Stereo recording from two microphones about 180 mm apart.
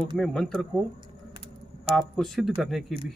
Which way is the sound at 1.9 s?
30° right (ahead or behind).